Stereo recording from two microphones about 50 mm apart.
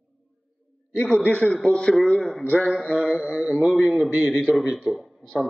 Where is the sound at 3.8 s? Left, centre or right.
Centre.